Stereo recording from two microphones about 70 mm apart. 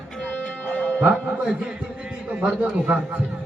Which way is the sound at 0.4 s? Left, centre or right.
Left.